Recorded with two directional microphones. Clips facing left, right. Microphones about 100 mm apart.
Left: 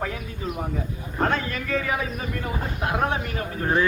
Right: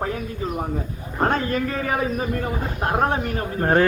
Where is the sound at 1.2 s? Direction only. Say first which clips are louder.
Right 4 dB; 40° right (ahead or behind).